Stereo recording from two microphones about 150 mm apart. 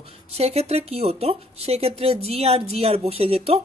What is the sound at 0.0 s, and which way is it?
A man's voice, 45° right (ahead or behind).